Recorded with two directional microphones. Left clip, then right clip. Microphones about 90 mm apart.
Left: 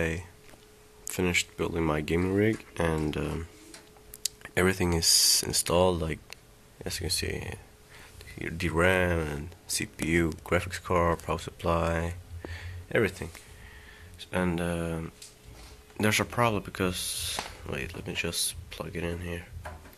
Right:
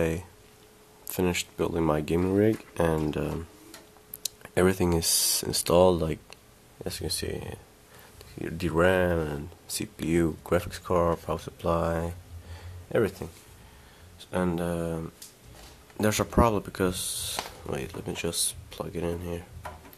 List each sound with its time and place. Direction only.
1.0 s speech: 30° right (ahead or behind)
6.3 s a sound: 25° right (ahead or behind)
8.4 s speech: 25° right (ahead or behind)
14.2 s speech: 20° right (ahead or behind)
16.0 s speech: 30° right (ahead or behind)